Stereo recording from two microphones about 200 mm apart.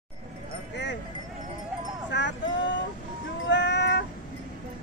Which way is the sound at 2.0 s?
60° left (ahead or behind).